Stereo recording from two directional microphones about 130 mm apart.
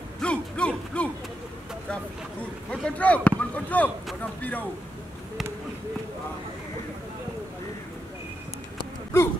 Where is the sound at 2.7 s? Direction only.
10° left (ahead or behind).